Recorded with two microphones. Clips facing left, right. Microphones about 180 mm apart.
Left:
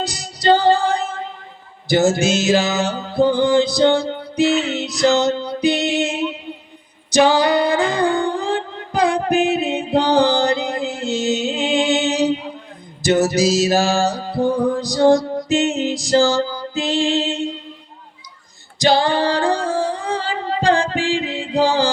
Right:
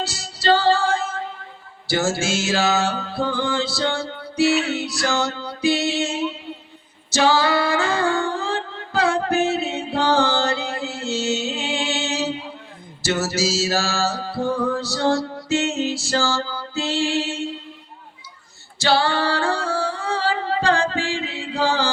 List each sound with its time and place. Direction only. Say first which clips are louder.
0.0 s music: left 4 dB; 15° left (ahead or behind)
7.1 s singing: left 4 dB; 15° left (ahead or behind)
13.0 s music: left 7 dB; 15° left (ahead or behind)
18.8 s female singing: left 4 dB; 15° left (ahead or behind)